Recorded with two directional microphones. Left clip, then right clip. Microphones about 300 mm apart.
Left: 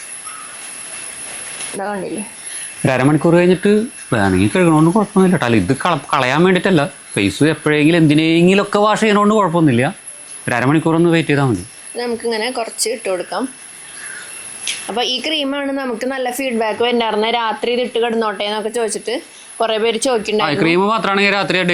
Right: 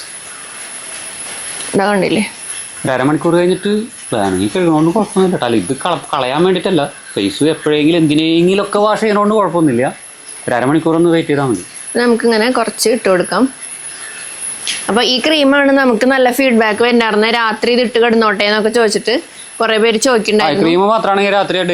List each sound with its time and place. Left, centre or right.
2.8 s speech: left
11.9 s speech: right
14.6 s speech: right
20.5 s a man's voice: centre